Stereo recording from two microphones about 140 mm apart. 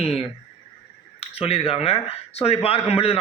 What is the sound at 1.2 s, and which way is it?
A man's voice, 45° left (ahead or behind).